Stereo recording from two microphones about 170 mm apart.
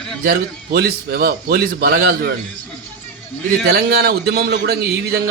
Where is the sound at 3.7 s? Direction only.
65° right (ahead or behind).